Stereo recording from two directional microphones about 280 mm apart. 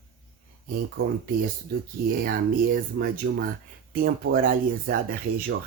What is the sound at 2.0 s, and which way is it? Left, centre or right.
Speech, right.